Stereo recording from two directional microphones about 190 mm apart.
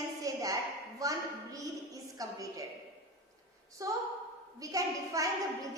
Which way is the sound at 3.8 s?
15° right (ahead or behind).